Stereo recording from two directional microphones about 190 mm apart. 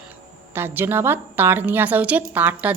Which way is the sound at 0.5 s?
10° right (ahead or behind).